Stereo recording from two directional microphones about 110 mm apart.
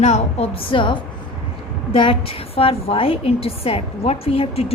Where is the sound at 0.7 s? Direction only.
45° left (ahead or behind).